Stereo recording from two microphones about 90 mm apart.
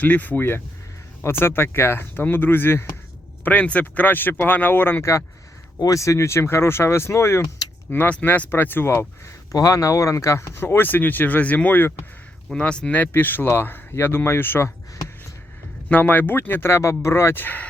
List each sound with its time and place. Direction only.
0.0 s speech: 20° left (ahead or behind)
7.9 s speech: 20° left (ahead or behind)
12.5 s speech: 10° left (ahead or behind)
15.9 s speech: 20° left (ahead or behind)